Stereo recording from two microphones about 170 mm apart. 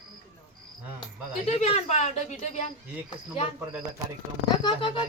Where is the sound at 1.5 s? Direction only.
35° left (ahead or behind).